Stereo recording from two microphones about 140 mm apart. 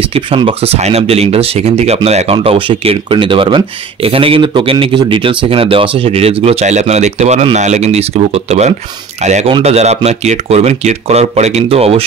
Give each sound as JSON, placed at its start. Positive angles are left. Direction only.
{"t": 0.0, "sound": "speech", "side_deg": -40}